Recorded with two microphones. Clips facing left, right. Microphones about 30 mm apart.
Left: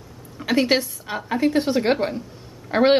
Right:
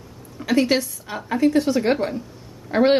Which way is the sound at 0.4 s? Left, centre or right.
Centre.